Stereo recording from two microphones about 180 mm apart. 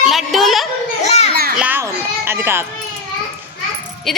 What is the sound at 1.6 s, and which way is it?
Children playing, 10° right (ahead or behind).